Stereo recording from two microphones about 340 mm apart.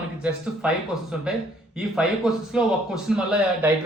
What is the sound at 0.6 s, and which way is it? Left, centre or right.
Speech, centre.